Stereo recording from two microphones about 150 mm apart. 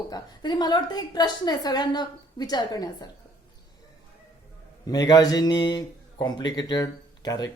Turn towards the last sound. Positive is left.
turn(degrees=25)  # may be behind; listen again after turning